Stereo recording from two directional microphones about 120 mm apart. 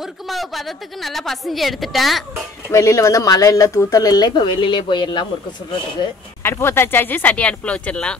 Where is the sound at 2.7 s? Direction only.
25° left (ahead or behind).